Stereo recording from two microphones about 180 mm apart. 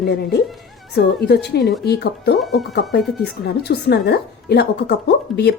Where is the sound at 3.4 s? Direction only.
60° left (ahead or behind).